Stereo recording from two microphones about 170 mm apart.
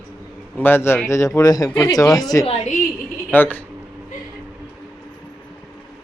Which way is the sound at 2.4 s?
40° left (ahead or behind).